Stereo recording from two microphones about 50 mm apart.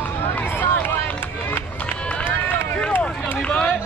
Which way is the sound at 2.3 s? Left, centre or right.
Left.